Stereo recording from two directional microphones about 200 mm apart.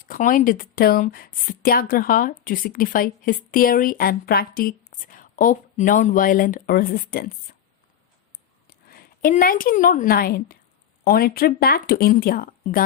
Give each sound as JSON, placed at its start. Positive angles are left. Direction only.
{"t": 0.0, "sound": "a woman's voice", "side_deg": 45}
{"t": 8.6, "sound": "a woman's voice", "side_deg": 45}